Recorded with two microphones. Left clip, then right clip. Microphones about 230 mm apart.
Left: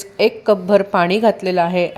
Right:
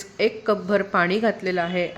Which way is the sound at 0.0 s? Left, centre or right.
Centre.